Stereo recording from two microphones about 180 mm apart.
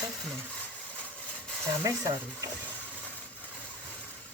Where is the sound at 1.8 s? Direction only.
15° right (ahead or behind).